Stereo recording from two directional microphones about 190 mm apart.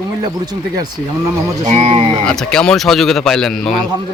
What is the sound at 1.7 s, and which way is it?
Speech, 35° right (ahead or behind).